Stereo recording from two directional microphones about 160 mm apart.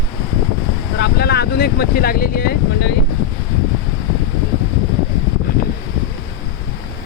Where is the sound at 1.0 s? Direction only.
90° left.